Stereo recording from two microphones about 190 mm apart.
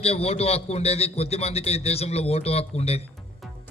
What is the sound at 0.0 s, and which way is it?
A man's voice, 30° left (ahead or behind).